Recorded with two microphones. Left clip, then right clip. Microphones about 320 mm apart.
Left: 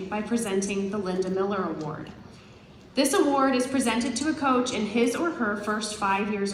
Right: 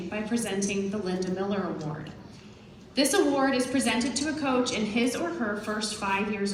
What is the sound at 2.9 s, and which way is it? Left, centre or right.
A woman's voice, centre.